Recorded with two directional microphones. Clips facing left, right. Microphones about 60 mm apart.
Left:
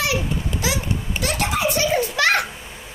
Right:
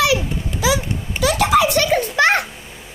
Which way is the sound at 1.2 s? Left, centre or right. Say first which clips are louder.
Right 8 dB; right.